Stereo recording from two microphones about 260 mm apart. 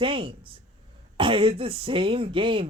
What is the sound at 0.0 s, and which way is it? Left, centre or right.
A man's voice, centre.